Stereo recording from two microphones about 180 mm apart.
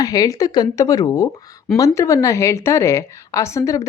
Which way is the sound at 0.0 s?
20° left (ahead or behind).